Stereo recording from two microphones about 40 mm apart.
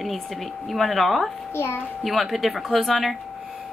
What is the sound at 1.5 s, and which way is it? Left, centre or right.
Speech, left.